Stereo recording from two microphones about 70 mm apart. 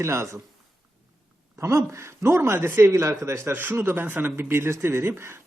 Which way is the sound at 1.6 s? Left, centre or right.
Right.